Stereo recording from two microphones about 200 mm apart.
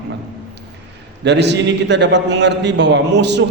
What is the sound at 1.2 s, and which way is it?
A man's voice, 60° right (ahead or behind).